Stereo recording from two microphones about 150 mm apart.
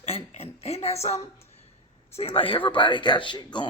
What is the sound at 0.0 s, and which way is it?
A woman's voice, 45° left (ahead or behind).